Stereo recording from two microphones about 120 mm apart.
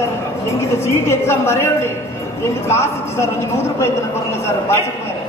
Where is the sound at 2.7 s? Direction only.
20° left (ahead or behind).